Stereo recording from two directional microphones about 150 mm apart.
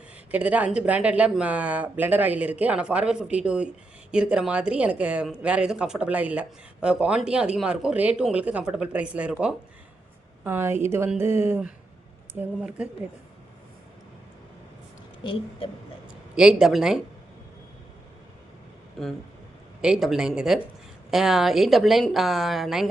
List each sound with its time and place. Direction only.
0.3 s a woman's voice: 10° right (ahead or behind)
15.2 s a woman's voice: 35° left (ahead or behind)
16.3 s speech: 5° right (ahead or behind)
19.0 s speech: 5° left (ahead or behind)